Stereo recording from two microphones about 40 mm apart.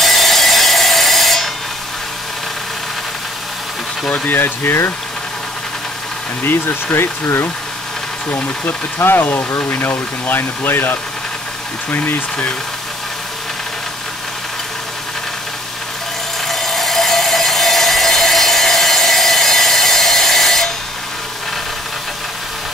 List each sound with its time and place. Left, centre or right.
0.0 s wood: centre
4.3 s speech: left
6.4 s speech: left
8.6 s speech: left
16.4 s tools: centre